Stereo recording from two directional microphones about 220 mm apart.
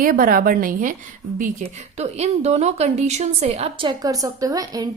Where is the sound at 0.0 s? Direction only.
40° right (ahead or behind).